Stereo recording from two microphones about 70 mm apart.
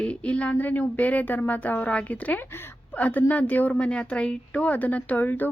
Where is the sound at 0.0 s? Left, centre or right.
Centre.